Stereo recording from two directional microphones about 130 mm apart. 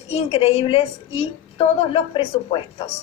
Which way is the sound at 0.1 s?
50° left (ahead or behind).